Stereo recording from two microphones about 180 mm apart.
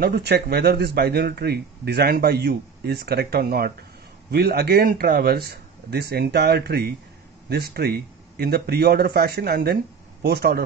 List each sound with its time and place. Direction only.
0.0 s speech: 60° right (ahead or behind)